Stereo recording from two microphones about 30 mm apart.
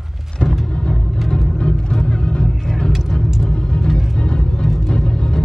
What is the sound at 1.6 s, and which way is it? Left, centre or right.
Vehicle, left.